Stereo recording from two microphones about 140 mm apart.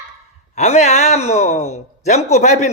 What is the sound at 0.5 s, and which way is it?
Speech, 50° left (ahead or behind).